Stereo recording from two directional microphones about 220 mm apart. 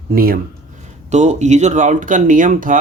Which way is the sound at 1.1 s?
30° right (ahead or behind).